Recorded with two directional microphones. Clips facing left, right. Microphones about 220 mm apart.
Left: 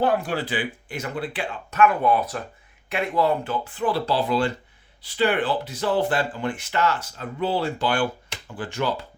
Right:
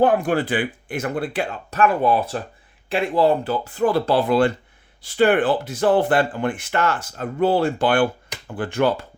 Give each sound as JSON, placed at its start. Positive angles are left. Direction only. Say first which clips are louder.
{"t": 0.0, "sound": "speech", "louder": "right 5 dB", "side_deg": -50}